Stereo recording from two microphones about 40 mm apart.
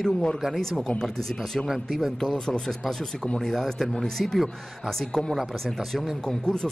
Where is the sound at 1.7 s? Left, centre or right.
Centre.